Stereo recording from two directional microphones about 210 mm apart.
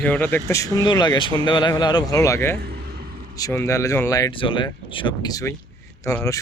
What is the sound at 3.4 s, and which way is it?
Speech, 15° left (ahead or behind).